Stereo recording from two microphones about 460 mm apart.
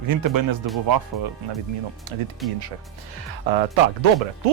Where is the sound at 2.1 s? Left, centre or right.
Right.